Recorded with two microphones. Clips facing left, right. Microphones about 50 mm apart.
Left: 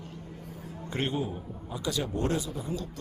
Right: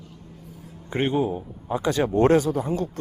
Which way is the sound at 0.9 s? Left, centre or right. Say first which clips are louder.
Right 8 dB; right.